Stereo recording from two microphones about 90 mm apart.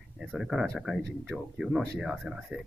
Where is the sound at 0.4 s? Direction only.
5° right (ahead or behind).